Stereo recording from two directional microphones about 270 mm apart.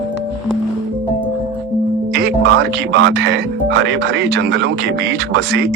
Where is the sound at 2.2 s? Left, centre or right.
Right.